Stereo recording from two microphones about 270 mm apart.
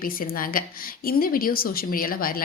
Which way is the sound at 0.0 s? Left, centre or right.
Left.